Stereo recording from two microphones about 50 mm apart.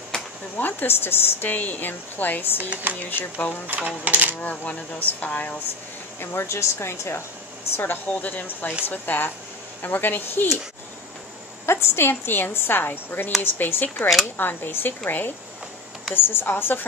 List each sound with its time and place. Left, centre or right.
0.1 s a sound: centre
0.6 s a woman's voice: left
2.7 s speech: right
3.1 s a woman's voice: left
3.6 s speech: right
4.4 s a woman's voice: left
6.2 s speech: left
7.7 s a woman's voice: left
11.6 s a woman's voice: left